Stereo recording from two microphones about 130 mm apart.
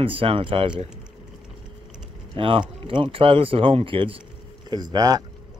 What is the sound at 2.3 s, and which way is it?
Speech, 45° right (ahead or behind).